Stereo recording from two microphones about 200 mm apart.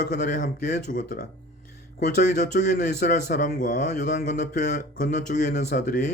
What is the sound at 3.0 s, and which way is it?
Speech, 40° left (ahead or behind).